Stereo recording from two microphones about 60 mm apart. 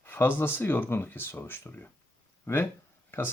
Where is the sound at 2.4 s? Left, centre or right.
Left.